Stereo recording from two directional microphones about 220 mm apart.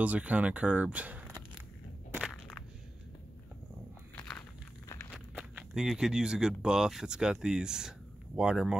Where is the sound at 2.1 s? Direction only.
Centre (ahead or behind).